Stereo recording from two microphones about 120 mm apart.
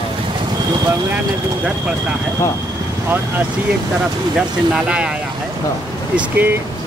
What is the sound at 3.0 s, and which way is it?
Speech, 15° right (ahead or behind).